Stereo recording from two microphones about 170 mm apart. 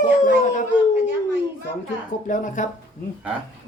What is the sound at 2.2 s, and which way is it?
Speech, 50° left (ahead or behind).